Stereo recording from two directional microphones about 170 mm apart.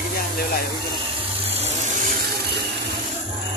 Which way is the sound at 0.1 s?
60° left (ahead or behind).